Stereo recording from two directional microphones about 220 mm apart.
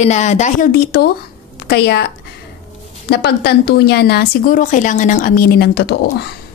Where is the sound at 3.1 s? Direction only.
50° left (ahead or behind).